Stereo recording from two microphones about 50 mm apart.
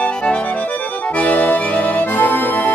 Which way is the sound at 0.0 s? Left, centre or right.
Left.